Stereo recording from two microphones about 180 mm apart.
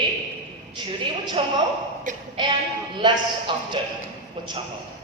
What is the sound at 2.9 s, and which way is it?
Speech, 25° right (ahead or behind).